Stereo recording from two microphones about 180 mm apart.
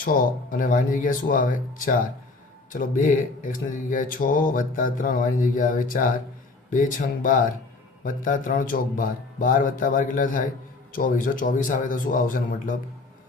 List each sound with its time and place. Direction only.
0.0 s speech: 50° left (ahead or behind)